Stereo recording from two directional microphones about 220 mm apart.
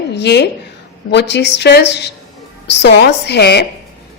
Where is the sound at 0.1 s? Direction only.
50° left (ahead or behind).